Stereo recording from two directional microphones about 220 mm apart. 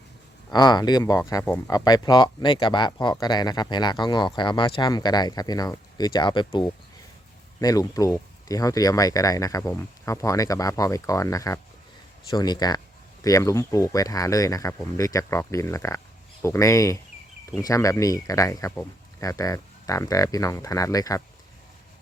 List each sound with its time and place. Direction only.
0.5 s speech: 20° left (ahead or behind)